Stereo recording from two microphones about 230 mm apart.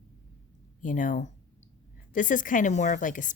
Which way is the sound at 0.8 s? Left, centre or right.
Left.